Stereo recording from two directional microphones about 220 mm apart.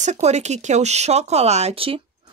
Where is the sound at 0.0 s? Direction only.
30° right (ahead or behind).